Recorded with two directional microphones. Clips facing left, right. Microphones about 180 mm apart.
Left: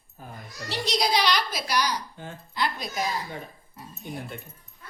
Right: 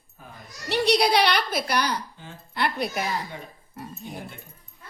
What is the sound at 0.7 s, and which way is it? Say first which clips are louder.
A woman's voice: right 5 dB; 65° right (ahead or behind).